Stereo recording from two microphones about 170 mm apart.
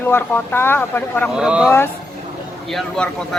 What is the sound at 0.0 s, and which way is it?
Speech, 10° left (ahead or behind).